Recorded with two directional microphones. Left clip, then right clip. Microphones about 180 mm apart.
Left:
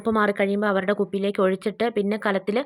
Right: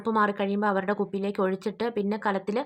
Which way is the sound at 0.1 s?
20° left (ahead or behind).